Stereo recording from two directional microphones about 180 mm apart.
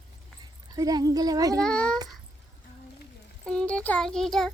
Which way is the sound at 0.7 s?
20° right (ahead or behind).